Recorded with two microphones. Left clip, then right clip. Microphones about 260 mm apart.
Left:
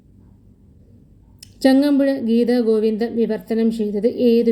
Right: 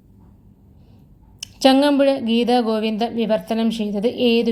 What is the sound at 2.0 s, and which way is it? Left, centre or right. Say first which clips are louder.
Speech: even; right.